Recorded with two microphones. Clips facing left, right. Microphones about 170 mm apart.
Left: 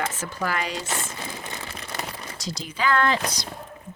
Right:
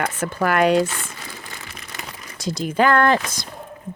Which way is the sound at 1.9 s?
30° left (ahead or behind).